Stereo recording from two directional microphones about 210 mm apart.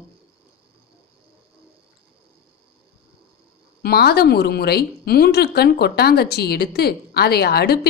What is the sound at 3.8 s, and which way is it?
A woman's voice, 50° left (ahead or behind).